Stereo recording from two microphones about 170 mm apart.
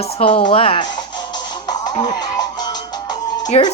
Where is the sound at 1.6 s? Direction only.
25° left (ahead or behind).